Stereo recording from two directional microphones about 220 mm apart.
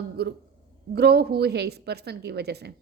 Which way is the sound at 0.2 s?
45° right (ahead or behind).